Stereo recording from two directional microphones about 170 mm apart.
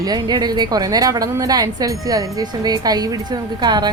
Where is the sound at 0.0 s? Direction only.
25° right (ahead or behind).